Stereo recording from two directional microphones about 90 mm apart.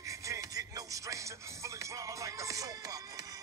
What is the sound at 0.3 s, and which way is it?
Music, 40° right (ahead or behind).